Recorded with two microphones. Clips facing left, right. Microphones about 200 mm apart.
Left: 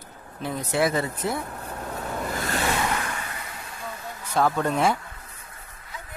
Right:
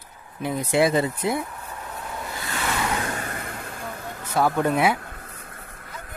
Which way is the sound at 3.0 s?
40° right (ahead or behind).